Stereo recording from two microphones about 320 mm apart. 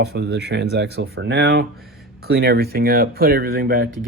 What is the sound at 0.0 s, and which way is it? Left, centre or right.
Speech, right.